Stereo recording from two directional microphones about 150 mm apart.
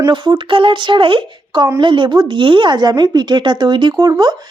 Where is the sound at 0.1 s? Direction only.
30° right (ahead or behind).